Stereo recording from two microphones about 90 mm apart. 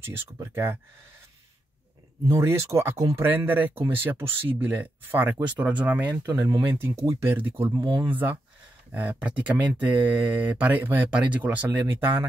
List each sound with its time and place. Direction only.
0.0 s speech: 25° right (ahead or behind)
2.2 s speech: 30° right (ahead or behind)
3.2 s speech: 20° right (ahead or behind)
6.2 s speech: 30° right (ahead or behind)